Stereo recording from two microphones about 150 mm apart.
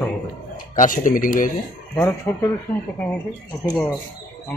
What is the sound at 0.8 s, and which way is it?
Speech, 65° left (ahead or behind).